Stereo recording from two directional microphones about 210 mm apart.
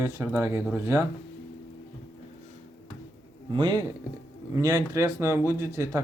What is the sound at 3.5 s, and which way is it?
Speech, 25° right (ahead or behind).